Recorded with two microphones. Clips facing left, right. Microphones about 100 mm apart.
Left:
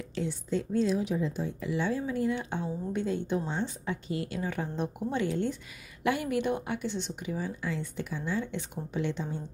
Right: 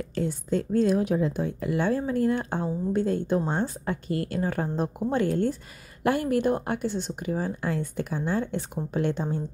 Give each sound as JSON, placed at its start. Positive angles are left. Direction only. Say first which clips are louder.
{"t": 0.1, "sound": "a woman's voice", "louder": "right 4 dB", "side_deg": -45}